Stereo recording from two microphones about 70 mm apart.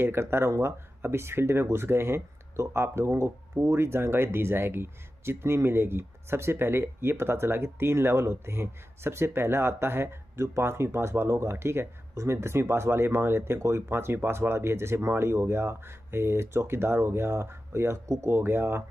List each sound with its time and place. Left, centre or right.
0.0 s speech: right